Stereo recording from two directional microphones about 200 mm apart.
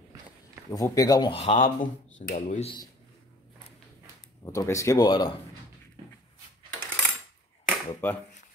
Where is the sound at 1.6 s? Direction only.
40° left (ahead or behind).